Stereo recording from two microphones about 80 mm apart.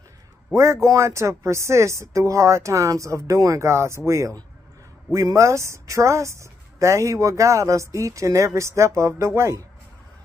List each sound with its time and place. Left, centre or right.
0.6 s speech: right